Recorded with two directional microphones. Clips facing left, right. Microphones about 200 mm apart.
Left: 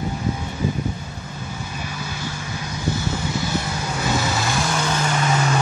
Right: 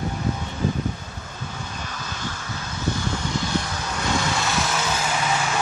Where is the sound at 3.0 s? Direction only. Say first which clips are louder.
Left 2 dB; 5° left (ahead or behind).